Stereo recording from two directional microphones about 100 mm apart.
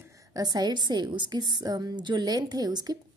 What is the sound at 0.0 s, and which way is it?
A woman's voice, 35° right (ahead or behind).